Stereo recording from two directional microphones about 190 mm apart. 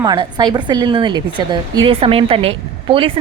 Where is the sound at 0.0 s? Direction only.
20° right (ahead or behind).